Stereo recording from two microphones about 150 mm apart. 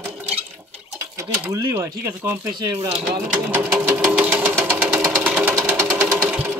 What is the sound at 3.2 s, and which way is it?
Sewing machine, 10° right (ahead or behind).